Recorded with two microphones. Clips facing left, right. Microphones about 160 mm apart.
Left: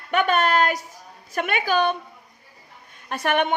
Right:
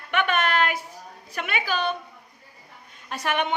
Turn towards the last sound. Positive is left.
turn(degrees=55)  # may be behind; listen again after turning